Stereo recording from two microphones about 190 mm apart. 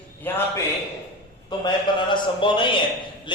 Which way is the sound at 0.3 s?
10° left (ahead or behind).